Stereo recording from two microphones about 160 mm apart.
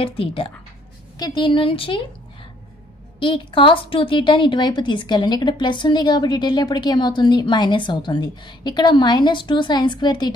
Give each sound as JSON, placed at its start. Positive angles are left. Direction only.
{"t": 0.0, "sound": "a woman's voice", "side_deg": 35}
{"t": 3.2, "sound": "a woman's voice", "side_deg": 30}